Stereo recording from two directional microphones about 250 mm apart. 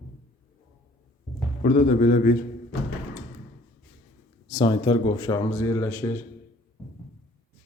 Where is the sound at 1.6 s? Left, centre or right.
Left.